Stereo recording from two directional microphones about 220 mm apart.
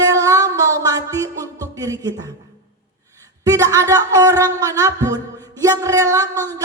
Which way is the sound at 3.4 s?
15° right (ahead or behind).